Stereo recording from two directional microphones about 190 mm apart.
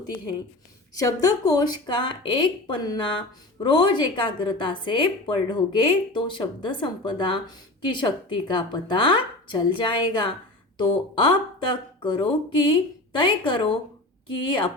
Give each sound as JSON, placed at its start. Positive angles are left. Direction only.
{"t": 0.9, "sound": "speech", "side_deg": 20}